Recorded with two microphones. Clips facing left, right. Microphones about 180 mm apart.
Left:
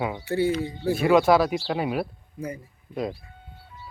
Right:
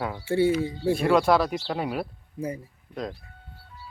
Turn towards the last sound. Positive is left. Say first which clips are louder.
# left 4 dB
turn(degrees=5)  # may be behind; listen again after turning